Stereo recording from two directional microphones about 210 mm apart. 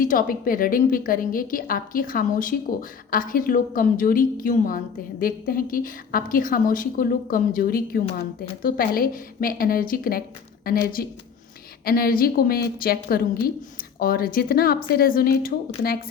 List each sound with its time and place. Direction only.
0.0 s a woman's voice: 40° left (ahead or behind)